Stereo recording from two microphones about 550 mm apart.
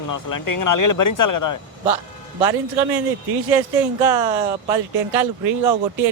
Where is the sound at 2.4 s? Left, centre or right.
Right.